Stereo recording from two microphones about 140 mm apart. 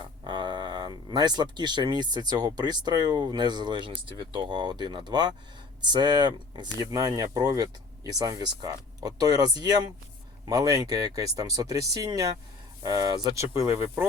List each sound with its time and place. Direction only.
0.0 s speech: 35° right (ahead or behind)